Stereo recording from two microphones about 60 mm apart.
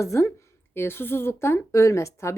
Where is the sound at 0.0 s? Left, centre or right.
Left.